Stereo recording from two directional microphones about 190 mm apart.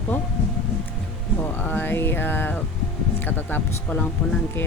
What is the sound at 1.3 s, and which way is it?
Speech, 10° left (ahead or behind).